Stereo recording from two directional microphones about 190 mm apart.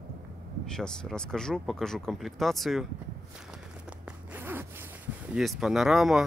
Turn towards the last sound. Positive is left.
turn(degrees=0)  # may be behind; listen again after turning